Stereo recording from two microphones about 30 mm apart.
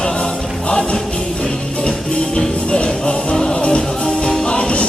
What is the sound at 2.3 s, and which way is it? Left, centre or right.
Music, left.